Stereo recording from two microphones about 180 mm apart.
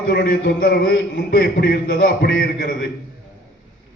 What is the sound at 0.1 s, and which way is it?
A man's voice, 65° left (ahead or behind).